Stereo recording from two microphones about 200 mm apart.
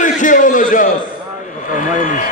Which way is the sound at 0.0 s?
40° left (ahead or behind).